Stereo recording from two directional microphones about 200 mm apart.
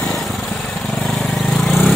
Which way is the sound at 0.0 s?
Centre (ahead or behind).